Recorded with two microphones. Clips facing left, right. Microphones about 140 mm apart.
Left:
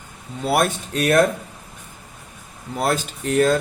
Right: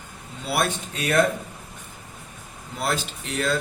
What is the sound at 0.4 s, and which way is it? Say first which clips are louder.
Speech: left 6 dB; 45° left (ahead or behind).